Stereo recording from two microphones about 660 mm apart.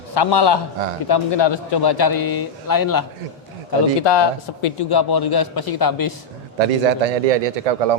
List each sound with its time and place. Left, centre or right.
0.1 s a man's voice: left
6.7 s speech: right